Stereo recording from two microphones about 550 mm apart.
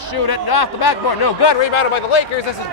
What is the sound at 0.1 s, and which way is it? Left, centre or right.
Speech, left.